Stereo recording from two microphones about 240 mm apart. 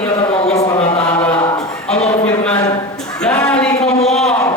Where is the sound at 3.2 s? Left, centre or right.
Centre.